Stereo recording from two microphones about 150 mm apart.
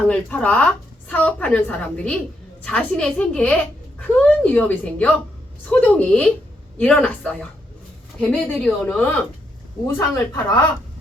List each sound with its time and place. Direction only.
0.1 s a woman's voice: 10° left (ahead or behind)
8.5 s a woman's voice: 5° left (ahead or behind)